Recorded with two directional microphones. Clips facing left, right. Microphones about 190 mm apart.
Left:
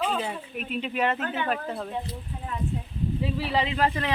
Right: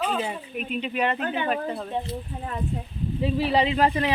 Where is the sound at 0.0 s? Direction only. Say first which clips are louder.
Right 1 dB; centre (ahead or behind).